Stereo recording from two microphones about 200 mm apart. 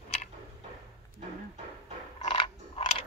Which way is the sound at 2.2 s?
25° left (ahead or behind).